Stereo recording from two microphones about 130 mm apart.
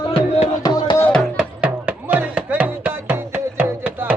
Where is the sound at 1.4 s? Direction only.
10° right (ahead or behind).